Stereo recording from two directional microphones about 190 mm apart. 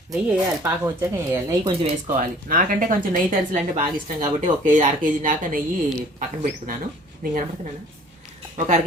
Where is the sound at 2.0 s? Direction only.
45° right (ahead or behind).